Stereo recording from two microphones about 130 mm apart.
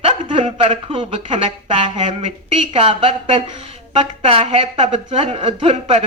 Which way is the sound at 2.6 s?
45° right (ahead or behind).